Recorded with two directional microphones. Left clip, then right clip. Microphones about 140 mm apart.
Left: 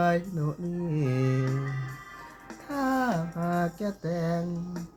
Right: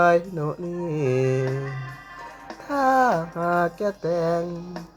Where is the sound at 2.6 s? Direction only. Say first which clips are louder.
Right 9 dB; 15° right (ahead or behind).